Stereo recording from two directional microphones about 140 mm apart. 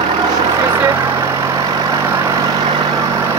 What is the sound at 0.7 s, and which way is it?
Vehicle, 15° right (ahead or behind).